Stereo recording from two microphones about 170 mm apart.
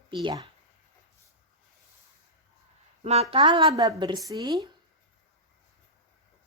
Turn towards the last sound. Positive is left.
turn(degrees=-25)  # may be behind; listen again after turning